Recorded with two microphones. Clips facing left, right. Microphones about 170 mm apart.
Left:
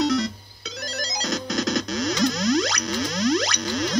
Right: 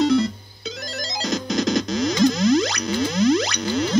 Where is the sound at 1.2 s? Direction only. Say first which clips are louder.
Right 4 dB; centre (ahead or behind).